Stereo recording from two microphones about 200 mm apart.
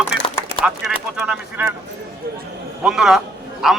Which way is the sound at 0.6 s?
5° right (ahead or behind).